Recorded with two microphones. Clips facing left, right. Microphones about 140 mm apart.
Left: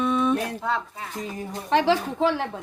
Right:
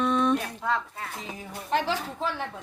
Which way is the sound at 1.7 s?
90° left.